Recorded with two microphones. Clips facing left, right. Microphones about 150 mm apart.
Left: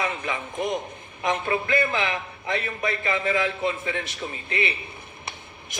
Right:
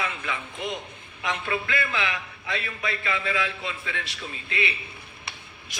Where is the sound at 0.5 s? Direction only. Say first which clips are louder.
Left 6 dB; 45° left (ahead or behind).